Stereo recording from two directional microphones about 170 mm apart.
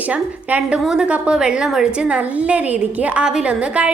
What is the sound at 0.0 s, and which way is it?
A woman's voice, 10° right (ahead or behind).